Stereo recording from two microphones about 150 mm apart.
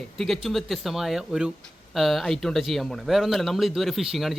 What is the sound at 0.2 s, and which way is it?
Speech, centre (ahead or behind).